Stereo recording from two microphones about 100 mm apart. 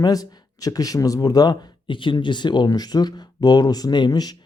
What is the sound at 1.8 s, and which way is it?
Speech, 55° left (ahead or behind).